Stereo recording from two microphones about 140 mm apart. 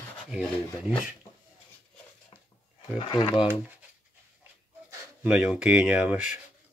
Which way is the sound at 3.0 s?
35° left (ahead or behind).